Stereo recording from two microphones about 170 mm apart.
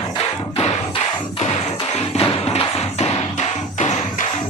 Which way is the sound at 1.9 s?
35° left (ahead or behind).